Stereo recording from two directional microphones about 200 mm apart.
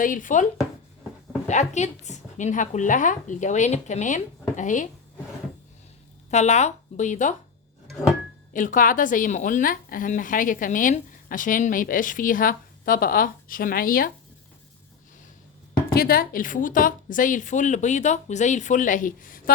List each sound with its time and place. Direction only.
0.0 s a woman's voice: 40° left (ahead or behind)
1.5 s a woman's voice: 35° left (ahead or behind)
6.3 s a woman's voice: 35° left (ahead or behind)
8.5 s a woman's voice: 40° left (ahead or behind)
15.9 s a woman's voice: 50° left (ahead or behind)